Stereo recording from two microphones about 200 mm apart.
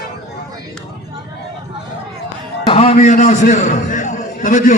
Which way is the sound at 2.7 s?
30° left (ahead or behind).